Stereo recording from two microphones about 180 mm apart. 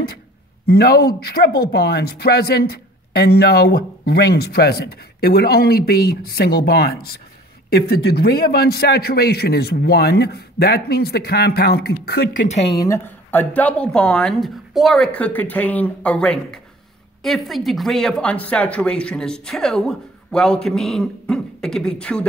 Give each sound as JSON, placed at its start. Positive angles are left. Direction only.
{"t": 0.7, "sound": "speech", "side_deg": 60}
{"t": 12.7, "sound": "a woman's voice", "side_deg": 15}